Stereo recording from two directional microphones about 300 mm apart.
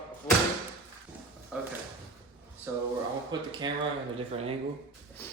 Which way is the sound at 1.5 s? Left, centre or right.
Centre.